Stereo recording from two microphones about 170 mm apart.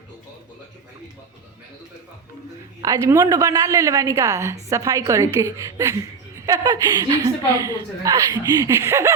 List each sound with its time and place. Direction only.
2.8 s a woman's voice: 20° right (ahead or behind)